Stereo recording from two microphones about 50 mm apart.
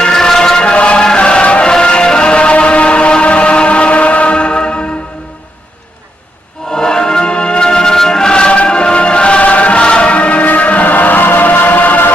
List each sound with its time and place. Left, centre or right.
0.0 s music: centre
6.7 s music: centre; by 12.1 s left